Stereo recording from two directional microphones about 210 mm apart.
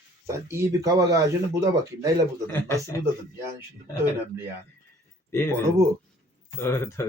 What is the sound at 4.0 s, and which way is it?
Speech, 10° right (ahead or behind).